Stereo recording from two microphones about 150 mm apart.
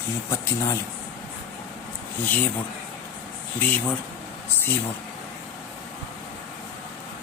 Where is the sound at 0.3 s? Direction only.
20° left (ahead or behind).